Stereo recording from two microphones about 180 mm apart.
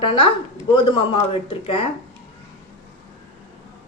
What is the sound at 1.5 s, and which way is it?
Speech, 30° left (ahead or behind).